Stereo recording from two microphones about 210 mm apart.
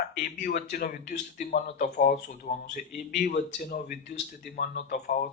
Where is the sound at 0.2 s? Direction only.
40° left (ahead or behind).